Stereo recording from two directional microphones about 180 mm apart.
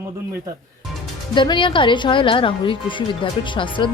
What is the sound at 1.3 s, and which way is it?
A woman's voice, 25° left (ahead or behind).